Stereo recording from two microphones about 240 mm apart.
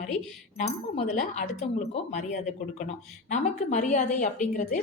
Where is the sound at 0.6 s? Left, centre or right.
Left.